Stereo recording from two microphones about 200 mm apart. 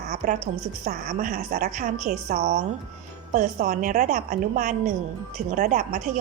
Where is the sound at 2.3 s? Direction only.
35° right (ahead or behind).